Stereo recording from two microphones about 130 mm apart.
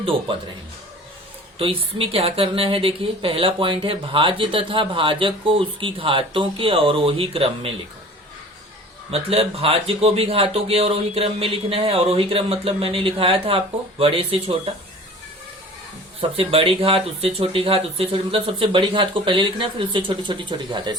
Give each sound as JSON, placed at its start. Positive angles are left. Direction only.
{"t": 1.5, "sound": "speech", "side_deg": -45}
{"t": 9.0, "sound": "speech", "side_deg": -50}
{"t": 16.3, "sound": "speech", "side_deg": -45}